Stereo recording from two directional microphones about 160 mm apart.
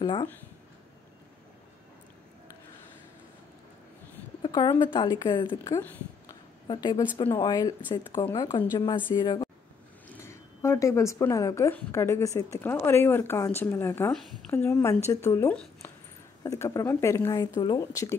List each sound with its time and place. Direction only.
0.0 s speech: 30° left (ahead or behind)
4.4 s speech: 30° left (ahead or behind)
5.8 s speech: 15° left (ahead or behind)
6.7 s speech: 30° left (ahead or behind)
14.1 s speech: 5° left (ahead or behind)
14.5 s speech: 15° left (ahead or behind)